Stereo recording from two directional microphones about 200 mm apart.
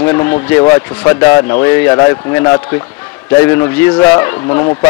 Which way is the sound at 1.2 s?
15° left (ahead or behind).